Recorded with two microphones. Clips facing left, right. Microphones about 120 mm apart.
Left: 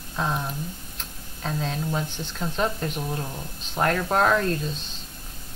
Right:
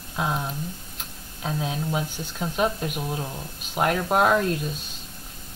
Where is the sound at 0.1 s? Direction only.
5° right (ahead or behind).